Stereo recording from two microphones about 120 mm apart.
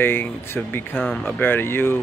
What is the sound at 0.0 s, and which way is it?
Speech, 20° left (ahead or behind).